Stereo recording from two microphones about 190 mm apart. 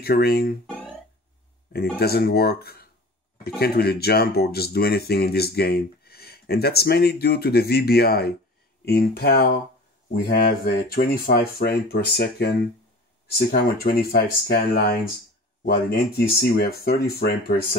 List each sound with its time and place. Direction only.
0.0 s speech: 55° left (ahead or behind)
0.7 s music: 5° left (ahead or behind)
2.0 s speech: 55° left (ahead or behind)